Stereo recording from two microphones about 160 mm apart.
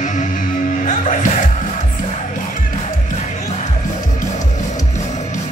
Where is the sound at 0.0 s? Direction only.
50° left (ahead or behind).